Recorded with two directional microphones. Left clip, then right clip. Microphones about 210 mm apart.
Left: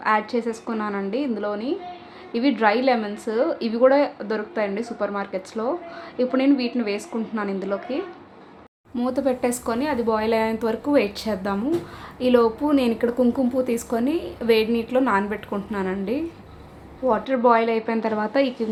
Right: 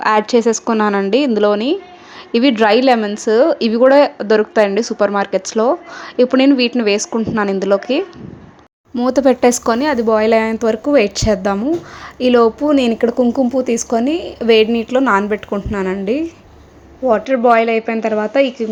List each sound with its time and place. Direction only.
0.0 s a woman's voice: 40° right (ahead or behind); by 18.6 s 15° right (ahead or behind)